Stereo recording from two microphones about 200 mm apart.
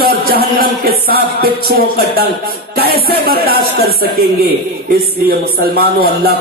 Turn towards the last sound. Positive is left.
turn(degrees=-50)  # may be behind; listen again after turning